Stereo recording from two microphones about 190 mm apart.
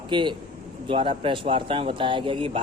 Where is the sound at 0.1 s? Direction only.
25° right (ahead or behind).